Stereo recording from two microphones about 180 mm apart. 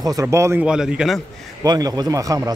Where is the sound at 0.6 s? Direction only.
5° right (ahead or behind).